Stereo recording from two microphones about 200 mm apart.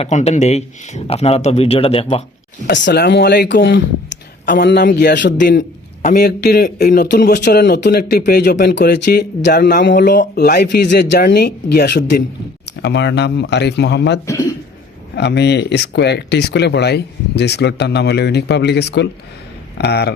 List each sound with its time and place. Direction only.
0.0 s speech: 35° left (ahead or behind)
2.6 s speech: 60° left (ahead or behind)
6.0 s speech: 50° left (ahead or behind)